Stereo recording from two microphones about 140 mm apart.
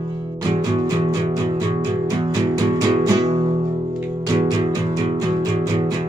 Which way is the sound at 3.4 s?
30° right (ahead or behind).